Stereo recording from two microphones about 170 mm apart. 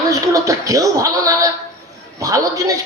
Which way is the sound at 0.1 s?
20° right (ahead or behind).